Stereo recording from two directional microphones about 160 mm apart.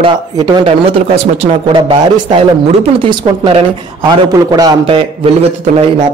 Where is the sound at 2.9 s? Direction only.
30° right (ahead or behind).